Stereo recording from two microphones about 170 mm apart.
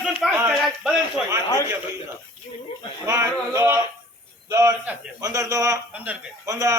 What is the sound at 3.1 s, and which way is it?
Speech, 15° right (ahead or behind).